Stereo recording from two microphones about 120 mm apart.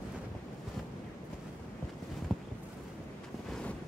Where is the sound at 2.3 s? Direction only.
Centre (ahead or behind).